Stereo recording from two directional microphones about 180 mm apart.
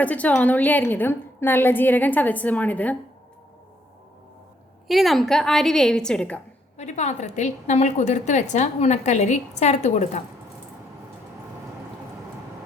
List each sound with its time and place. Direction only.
0.0 s a woman's voice: 10° left (ahead or behind)
4.9 s a woman's voice: centre (ahead or behind)
6.7 s a woman's voice: 40° left (ahead or behind)